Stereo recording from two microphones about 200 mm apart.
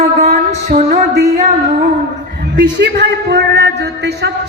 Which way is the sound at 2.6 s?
55° right (ahead or behind).